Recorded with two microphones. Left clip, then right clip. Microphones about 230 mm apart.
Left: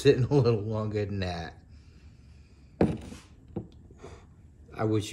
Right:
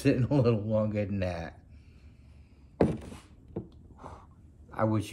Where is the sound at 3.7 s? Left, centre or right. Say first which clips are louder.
Right 1 dB; centre.